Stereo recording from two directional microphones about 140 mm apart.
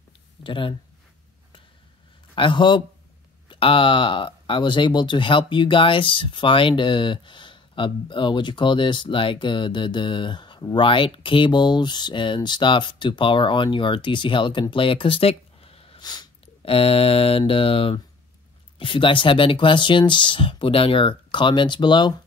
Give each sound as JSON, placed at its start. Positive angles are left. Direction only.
{"t": 0.4, "sound": "speech", "side_deg": 35}
{"t": 2.3, "sound": "speech", "side_deg": 35}
{"t": 16.0, "sound": "mantra", "side_deg": 30}
{"t": 18.8, "sound": "speech", "side_deg": 35}